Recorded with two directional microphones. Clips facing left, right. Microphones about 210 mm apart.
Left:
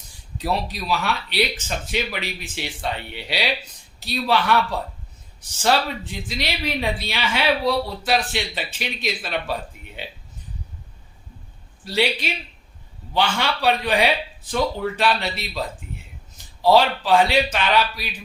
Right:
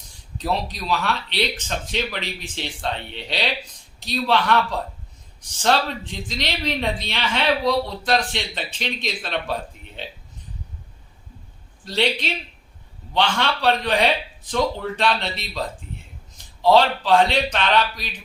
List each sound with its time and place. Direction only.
0.3 s speech: 5° left (ahead or behind)
11.9 s speech: 5° left (ahead or behind)